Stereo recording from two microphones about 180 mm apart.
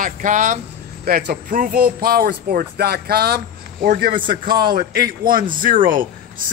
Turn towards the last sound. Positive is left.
turn(degrees=-50)  # may be behind; listen again after turning